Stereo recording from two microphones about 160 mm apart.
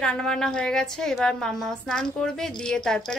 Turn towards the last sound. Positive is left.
turn(degrees=5)  # may be behind; listen again after turning